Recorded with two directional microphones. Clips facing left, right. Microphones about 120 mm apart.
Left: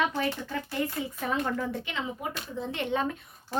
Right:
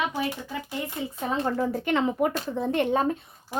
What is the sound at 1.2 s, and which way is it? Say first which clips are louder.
Speech: right 4 dB; 30° right (ahead or behind).